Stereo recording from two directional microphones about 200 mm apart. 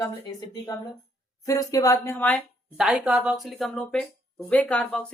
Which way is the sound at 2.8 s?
5° right (ahead or behind).